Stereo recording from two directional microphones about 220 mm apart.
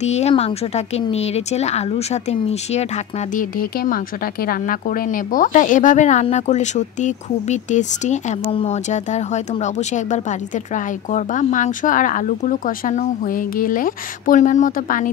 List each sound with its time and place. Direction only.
0.0 s speech: 30° left (ahead or behind)